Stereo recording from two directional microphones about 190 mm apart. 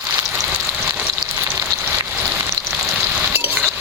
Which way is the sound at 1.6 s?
15° right (ahead or behind).